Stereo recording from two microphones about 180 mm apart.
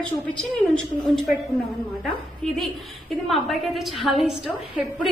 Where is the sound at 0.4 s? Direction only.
Centre (ahead or behind).